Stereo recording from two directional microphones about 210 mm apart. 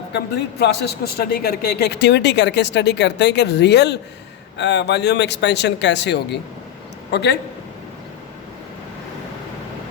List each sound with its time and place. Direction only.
0.1 s a man's voice: 55° left (ahead or behind)